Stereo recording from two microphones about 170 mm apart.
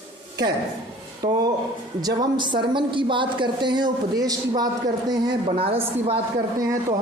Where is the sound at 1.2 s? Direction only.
25° right (ahead or behind).